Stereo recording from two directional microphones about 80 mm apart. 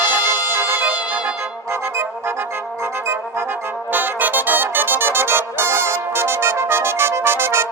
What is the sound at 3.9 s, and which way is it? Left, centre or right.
Music, right.